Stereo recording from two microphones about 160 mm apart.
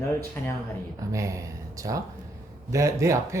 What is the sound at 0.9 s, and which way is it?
Speech, 20° right (ahead or behind).